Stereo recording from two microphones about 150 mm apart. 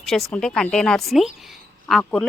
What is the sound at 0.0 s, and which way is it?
Speech, centre (ahead or behind).